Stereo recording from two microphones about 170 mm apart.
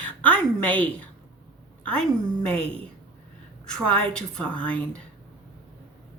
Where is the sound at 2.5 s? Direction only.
35° right (ahead or behind).